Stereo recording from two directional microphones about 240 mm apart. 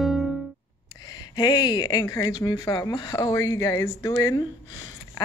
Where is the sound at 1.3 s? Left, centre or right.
Centre.